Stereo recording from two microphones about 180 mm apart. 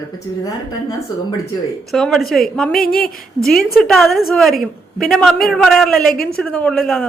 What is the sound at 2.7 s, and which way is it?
Speech, 55° left (ahead or behind).